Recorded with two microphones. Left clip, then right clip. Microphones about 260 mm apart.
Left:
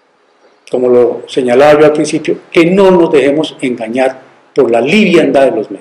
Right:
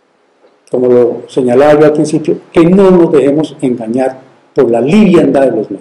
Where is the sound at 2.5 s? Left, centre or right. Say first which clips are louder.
Even; left.